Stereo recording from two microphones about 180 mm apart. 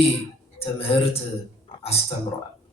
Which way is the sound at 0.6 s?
30° left (ahead or behind).